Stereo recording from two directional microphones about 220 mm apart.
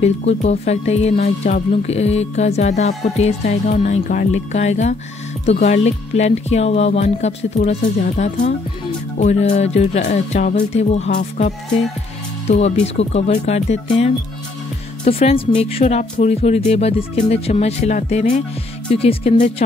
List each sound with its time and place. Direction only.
0.0 s speech: 30° left (ahead or behind)